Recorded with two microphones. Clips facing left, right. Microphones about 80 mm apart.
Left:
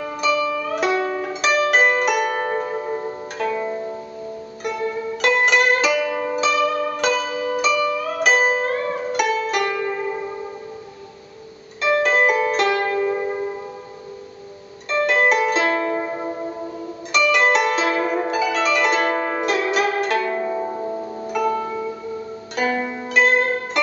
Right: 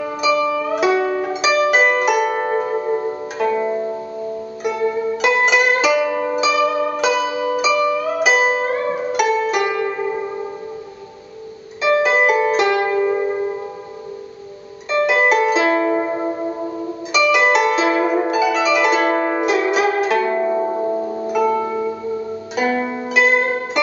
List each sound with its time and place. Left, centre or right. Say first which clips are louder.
0.0 s music: right 3 dB; centre
11.8 s music: right 2 dB; centre
14.9 s music: right 2 dB; centre
17.1 s harp: right 2 dB; centre
20.3 s zither: right 5 dB; centre
21.3 s music: right 3 dB; centre